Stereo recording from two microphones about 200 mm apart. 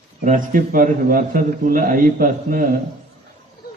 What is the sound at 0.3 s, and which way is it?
A man's voice, 40° right (ahead or behind).